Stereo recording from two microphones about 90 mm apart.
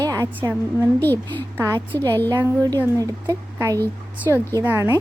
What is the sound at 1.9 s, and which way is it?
Speech, 25° left (ahead or behind).